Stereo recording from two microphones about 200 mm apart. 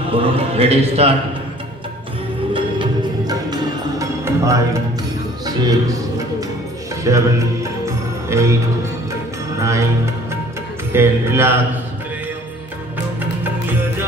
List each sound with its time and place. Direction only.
0.1 s a man's voice: 30° right (ahead or behind)
2.5 s music: 20° right (ahead or behind)
7.0 s music: 15° right (ahead or behind)
9.6 s music: 15° right (ahead or behind)
10.9 s speech: 10° right (ahead or behind)
13.2 s music: 10° right (ahead or behind)